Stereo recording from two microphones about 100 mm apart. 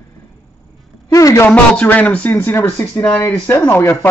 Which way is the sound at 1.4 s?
15° left (ahead or behind).